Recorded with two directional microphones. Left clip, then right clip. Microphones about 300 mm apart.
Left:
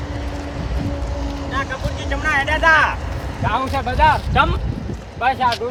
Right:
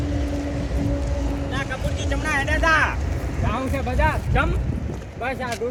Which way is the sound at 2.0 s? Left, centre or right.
Left.